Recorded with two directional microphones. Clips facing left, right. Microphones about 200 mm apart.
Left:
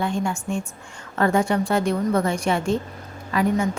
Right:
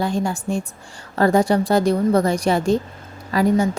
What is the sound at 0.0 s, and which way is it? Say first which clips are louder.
A woman's voice: right 3 dB; 35° right (ahead or behind).